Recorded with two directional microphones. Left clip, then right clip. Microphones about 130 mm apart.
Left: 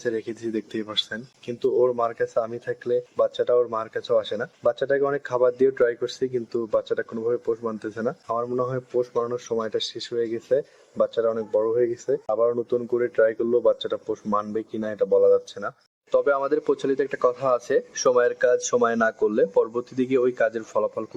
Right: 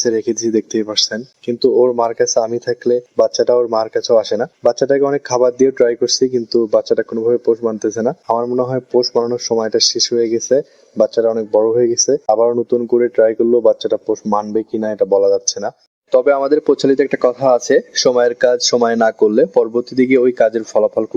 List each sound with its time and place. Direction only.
0.0 s speech: 55° right (ahead or behind); by 8.6 s 30° right (ahead or behind)
8.6 s speech: 45° right (ahead or behind)
9.6 s speech: 50° right (ahead or behind)
14.3 s speech: 30° right (ahead or behind)
14.5 s speech: 50° right (ahead or behind)